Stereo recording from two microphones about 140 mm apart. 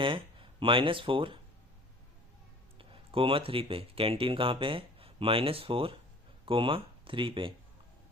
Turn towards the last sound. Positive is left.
turn(degrees=-40)  # may be behind; listen again after turning